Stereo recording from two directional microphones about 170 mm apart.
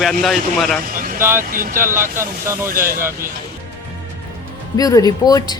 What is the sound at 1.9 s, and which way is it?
Speech, 15° right (ahead or behind).